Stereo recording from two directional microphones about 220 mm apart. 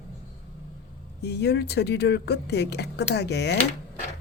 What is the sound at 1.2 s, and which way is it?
Speech, 50° left (ahead or behind).